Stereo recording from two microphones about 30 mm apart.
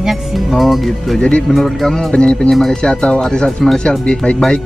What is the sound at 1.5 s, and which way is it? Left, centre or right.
Speech, centre.